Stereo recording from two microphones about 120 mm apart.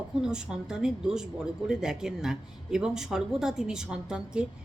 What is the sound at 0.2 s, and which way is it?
A woman's voice, 5° right (ahead or behind).